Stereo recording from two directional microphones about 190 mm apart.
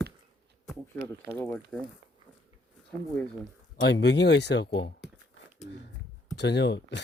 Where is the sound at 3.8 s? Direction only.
65° left (ahead or behind).